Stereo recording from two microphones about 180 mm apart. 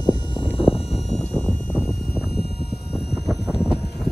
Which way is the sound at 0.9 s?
5° left (ahead or behind).